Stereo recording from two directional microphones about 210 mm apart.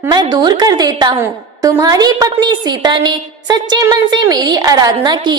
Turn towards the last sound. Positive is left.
turn(degrees=-20)  # may be behind; listen again after turning